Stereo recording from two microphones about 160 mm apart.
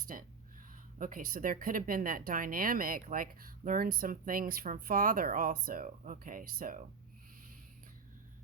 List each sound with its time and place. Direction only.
0.1 s speech: 55° right (ahead or behind)